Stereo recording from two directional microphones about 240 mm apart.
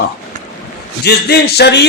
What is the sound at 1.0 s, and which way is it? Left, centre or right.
Speech, left.